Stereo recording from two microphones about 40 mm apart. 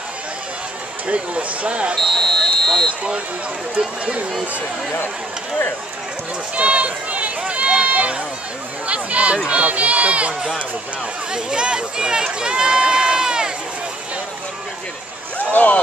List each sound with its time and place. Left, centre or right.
1.0 s speech: right
2.0 s basketball bounce: centre
6.5 s run: right
8.8 s speech: right
11.3 s speech: right
15.3 s a sound: left